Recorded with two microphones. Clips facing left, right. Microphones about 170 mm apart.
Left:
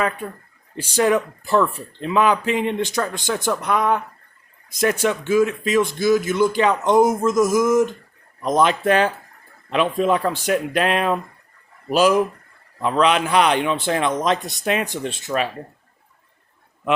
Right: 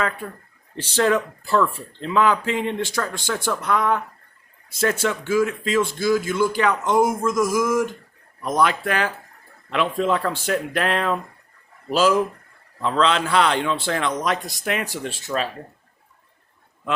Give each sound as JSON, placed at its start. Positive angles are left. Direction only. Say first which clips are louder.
{"t": 0.8, "sound": "speech", "louder": "left 2 dB", "side_deg": 15}